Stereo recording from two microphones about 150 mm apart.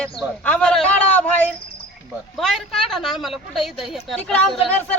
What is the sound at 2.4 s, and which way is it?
A woman's voice, centre (ahead or behind).